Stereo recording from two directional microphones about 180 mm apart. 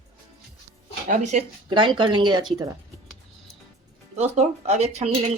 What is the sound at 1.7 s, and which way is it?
Speech, 25° right (ahead or behind).